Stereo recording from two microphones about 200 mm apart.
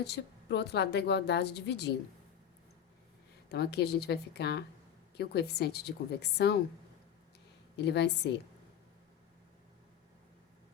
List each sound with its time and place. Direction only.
0.0 s a woman's voice: 55° left (ahead or behind)
3.5 s a woman's voice: 55° left (ahead or behind)
7.8 s a woman's voice: 55° left (ahead or behind)